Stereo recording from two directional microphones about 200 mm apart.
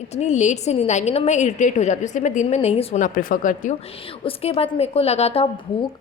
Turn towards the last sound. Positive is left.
turn(degrees=30)  # may be behind; listen again after turning